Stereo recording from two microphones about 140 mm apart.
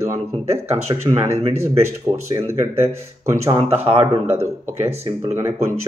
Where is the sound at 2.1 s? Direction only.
20° right (ahead or behind).